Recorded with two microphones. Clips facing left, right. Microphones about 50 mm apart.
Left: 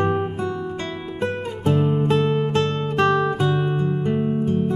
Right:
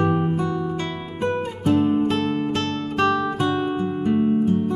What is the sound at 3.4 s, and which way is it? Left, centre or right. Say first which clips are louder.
Music: even; centre.